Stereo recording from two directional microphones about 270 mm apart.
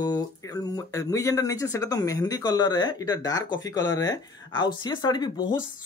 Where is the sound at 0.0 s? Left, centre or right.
Centre.